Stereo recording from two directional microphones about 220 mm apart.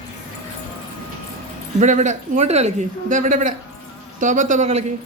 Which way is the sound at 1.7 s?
35° right (ahead or behind).